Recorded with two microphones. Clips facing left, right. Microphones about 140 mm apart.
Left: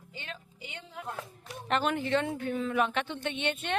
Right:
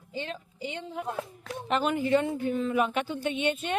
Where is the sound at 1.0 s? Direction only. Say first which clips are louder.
Right 4 dB; 20° right (ahead or behind).